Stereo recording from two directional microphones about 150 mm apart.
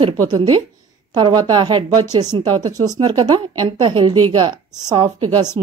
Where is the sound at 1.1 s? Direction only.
30° right (ahead or behind).